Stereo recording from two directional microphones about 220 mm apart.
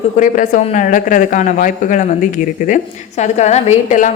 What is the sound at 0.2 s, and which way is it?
A woman's voice, 35° left (ahead or behind).